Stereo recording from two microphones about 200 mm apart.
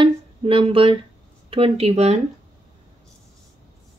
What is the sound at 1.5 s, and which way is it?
Speech, 30° right (ahead or behind).